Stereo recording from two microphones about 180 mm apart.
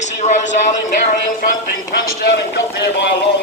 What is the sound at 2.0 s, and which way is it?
A man's voice, 55° left (ahead or behind).